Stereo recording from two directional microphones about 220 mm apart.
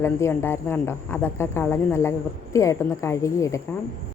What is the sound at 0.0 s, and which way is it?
Speech, 10° left (ahead or behind).